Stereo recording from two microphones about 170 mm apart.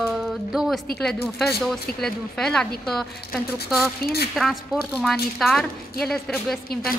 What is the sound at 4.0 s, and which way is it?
Speech, 70° left (ahead or behind).